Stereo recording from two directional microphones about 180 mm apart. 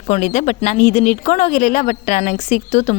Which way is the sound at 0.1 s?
40° left (ahead or behind).